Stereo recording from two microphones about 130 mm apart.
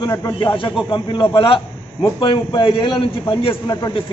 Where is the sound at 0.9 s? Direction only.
35° left (ahead or behind).